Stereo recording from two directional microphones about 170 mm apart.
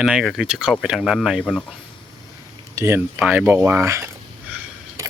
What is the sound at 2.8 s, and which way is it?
Speech, 15° right (ahead or behind).